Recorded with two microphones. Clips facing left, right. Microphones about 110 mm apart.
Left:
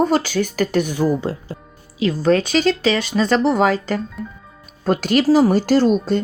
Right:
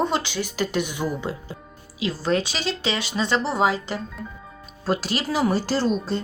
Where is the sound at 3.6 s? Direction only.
55° left (ahead or behind).